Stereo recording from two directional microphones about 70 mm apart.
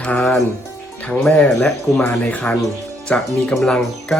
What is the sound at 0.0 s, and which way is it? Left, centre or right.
Speech, centre.